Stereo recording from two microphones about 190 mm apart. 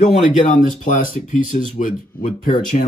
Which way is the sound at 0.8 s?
45° left (ahead or behind).